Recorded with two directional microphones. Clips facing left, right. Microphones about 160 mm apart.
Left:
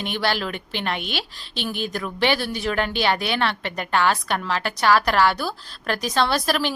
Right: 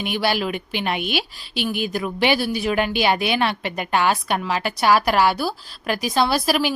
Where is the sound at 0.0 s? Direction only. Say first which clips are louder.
Right 3 dB; 10° right (ahead or behind).